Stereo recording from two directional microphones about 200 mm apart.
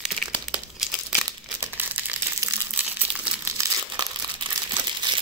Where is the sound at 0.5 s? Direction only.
5° right (ahead or behind); by 5.2 s 20° right (ahead or behind).